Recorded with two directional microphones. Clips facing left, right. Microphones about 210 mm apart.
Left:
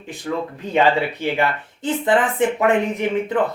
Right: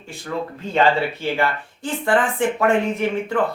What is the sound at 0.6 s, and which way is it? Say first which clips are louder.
Speech: left 1 dB; 15° left (ahead or behind).